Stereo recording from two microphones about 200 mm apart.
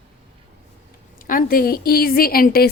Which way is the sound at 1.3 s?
45° left (ahead or behind).